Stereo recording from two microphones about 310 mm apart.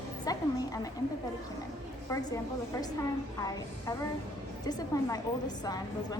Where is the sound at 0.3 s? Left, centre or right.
Centre.